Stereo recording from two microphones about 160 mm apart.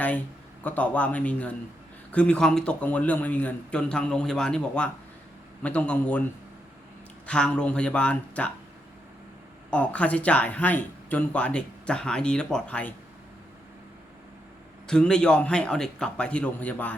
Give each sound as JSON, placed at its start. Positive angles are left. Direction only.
{"t": 0.6, "sound": "speech", "side_deg": 10}
{"t": 7.3, "sound": "speech", "side_deg": 5}
{"t": 9.6, "sound": "speech", "side_deg": 10}
{"t": 14.8, "sound": "a man's voice", "side_deg": 5}